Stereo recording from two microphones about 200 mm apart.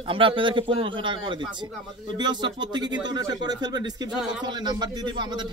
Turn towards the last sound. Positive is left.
turn(degrees=-20)  # may be behind; listen again after turning